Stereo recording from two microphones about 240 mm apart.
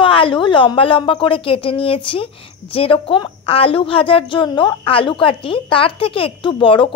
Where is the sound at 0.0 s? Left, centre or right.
Left.